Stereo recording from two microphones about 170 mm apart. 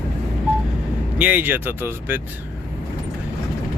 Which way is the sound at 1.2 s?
10° right (ahead or behind).